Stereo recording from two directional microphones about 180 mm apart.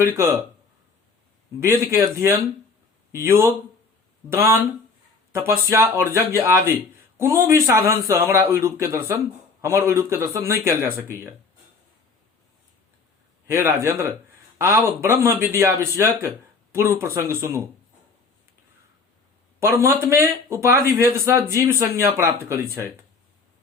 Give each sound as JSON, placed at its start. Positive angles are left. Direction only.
{"t": 0.0, "sound": "speech", "side_deg": -15}
{"t": 1.6, "sound": "speech", "side_deg": -15}
{"t": 13.5, "sound": "speech", "side_deg": -15}
{"t": 19.5, "sound": "speech", "side_deg": -15}